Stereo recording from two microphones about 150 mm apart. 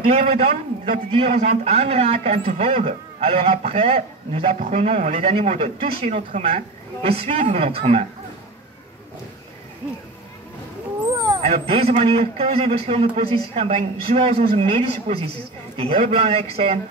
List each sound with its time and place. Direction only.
0.1 s a man's voice: 40° right (ahead or behind)
11.1 s vehicle: 25° right (ahead or behind)
11.4 s a man's voice: 40° right (ahead or behind)